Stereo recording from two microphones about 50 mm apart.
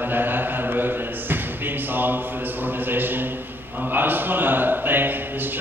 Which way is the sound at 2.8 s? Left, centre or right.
Right.